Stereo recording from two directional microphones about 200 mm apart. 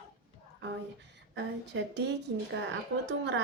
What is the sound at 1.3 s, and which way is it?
Speech, 60° right (ahead or behind).